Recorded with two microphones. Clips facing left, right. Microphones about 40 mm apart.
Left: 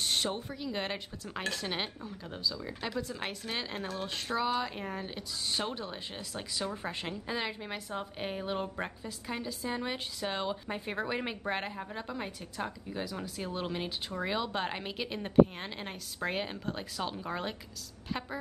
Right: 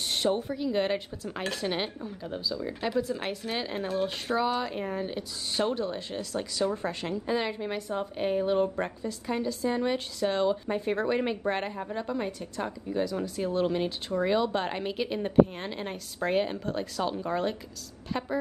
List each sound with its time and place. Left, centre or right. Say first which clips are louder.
0.0 s a woman's voice: right 5 dB; centre
7.2 s a woman's voice: right 7 dB; centre